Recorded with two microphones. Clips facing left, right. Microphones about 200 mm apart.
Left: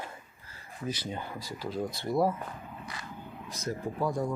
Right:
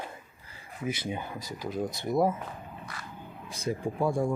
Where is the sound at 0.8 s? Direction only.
10° right (ahead or behind).